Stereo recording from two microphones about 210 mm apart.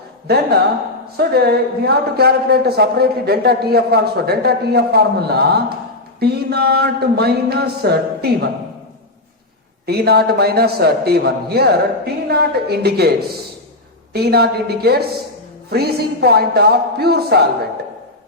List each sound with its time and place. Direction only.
1.1 s a man's voice: 50° right (ahead or behind)
9.8 s a man's voice: 50° right (ahead or behind)
14.1 s a man's voice: 50° right (ahead or behind)